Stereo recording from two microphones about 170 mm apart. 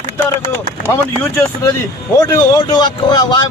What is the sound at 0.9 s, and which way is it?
A man's voice, 15° left (ahead or behind).